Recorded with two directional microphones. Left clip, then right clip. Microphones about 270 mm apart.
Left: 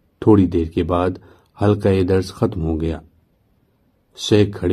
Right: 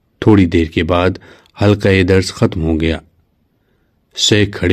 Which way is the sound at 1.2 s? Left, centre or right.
Right.